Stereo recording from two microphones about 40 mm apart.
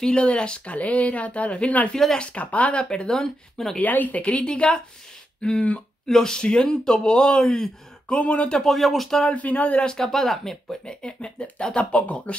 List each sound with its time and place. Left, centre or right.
0.1 s speech: left
2.8 s speech: centre
3.8 s speech: left
4.2 s speech: left; by 7.7 s centre
8.1 s speech: left
8.6 s speech: centre
9.2 s speech: left
9.8 s speech: centre
11.7 s speech: left